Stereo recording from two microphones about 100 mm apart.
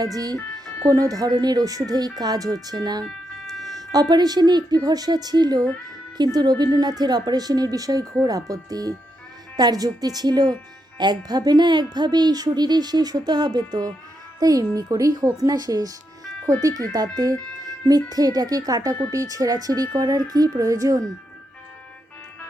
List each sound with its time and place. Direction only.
0.0 s speech: 40° right (ahead or behind)
3.0 s music: 5° left (ahead or behind)
4.1 s a child's voice: 45° right (ahead or behind)